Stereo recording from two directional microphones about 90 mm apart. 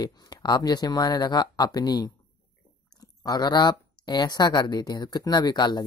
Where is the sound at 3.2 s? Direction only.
50° left (ahead or behind).